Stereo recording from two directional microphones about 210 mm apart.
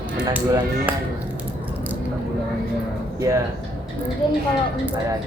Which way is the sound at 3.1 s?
15° right (ahead or behind).